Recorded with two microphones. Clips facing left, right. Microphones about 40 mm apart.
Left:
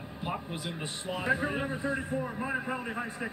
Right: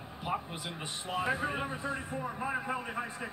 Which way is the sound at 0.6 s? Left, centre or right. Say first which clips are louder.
Left 3 dB; centre.